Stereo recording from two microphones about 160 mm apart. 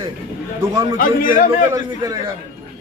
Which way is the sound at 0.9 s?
55° left (ahead or behind).